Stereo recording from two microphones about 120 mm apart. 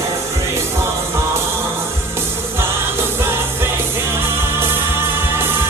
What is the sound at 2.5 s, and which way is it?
Music, 20° right (ahead or behind).